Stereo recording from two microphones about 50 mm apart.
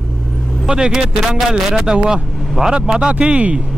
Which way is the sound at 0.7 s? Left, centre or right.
Centre.